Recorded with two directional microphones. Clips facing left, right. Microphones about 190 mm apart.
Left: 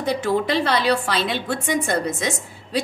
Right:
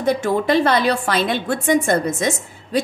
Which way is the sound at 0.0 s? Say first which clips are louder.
Right 3 dB; 50° right (ahead or behind).